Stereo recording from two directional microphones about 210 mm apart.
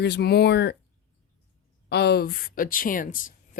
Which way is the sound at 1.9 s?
50° left (ahead or behind).